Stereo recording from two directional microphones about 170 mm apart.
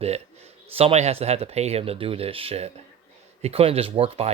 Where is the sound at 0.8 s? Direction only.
35° right (ahead or behind).